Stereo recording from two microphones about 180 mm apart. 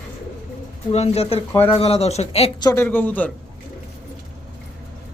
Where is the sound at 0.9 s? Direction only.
35° left (ahead or behind).